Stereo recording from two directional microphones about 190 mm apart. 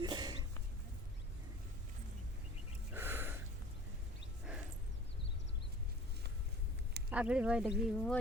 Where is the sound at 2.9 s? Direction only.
10° right (ahead or behind).